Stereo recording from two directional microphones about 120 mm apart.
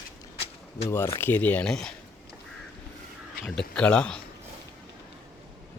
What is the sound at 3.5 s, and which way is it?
Speech, 10° left (ahead or behind).